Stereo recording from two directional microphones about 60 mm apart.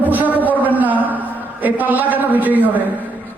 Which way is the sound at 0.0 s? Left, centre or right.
Right.